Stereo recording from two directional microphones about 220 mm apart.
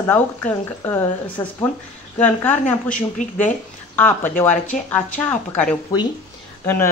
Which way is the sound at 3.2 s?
35° left (ahead or behind).